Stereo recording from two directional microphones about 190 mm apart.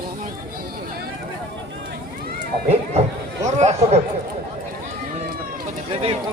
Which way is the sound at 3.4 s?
35° right (ahead or behind).